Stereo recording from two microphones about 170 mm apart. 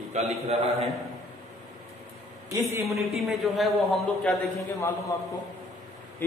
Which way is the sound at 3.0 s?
Centre (ahead or behind).